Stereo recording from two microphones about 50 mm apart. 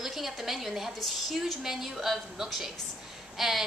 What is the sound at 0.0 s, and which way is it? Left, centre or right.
A woman's voice, centre.